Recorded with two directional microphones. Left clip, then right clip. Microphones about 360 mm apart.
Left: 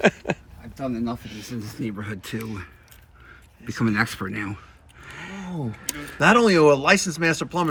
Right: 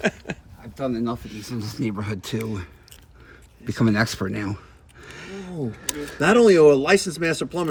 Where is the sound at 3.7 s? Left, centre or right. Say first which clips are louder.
Right 1 dB; centre.